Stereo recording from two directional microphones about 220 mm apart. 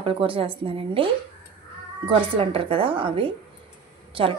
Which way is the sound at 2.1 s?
25° right (ahead or behind).